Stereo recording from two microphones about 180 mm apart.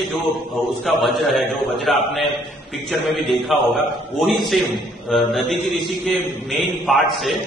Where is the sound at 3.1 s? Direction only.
Centre (ahead or behind).